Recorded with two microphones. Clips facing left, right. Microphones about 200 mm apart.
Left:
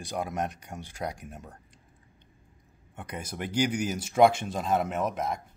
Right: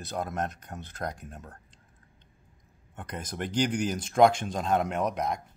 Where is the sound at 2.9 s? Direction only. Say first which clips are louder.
Right 1 dB; 10° left (ahead or behind).